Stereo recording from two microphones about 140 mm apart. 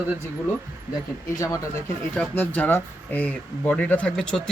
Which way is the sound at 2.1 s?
10° left (ahead or behind).